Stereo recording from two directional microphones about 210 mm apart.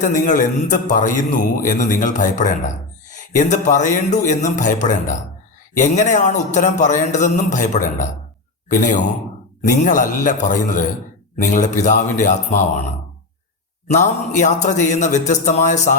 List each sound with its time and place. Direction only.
0.0 s a man's voice: 40° left (ahead or behind)
13.8 s a man's voice: 35° left (ahead or behind)